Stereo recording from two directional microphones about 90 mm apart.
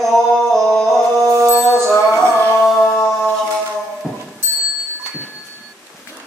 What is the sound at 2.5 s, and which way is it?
Music, centre (ahead or behind).